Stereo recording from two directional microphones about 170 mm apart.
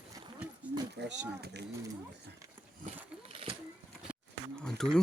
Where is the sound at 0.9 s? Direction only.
90° right.